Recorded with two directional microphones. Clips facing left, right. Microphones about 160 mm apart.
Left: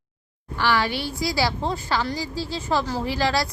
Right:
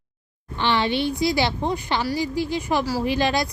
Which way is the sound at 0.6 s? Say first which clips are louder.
Right 2 dB; 25° right (ahead or behind).